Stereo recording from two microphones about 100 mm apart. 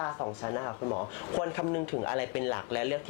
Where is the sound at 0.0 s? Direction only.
30° left (ahead or behind).